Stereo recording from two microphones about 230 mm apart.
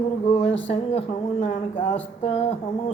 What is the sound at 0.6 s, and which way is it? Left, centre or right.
Music, left.